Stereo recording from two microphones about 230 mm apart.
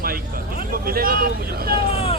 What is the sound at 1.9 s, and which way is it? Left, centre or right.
Vehicle, left.